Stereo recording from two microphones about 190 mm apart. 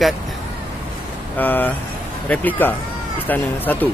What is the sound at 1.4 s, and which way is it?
Speech, 10° left (ahead or behind).